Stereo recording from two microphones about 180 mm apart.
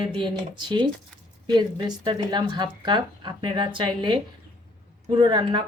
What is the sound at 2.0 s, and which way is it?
Speech, 25° right (ahead or behind).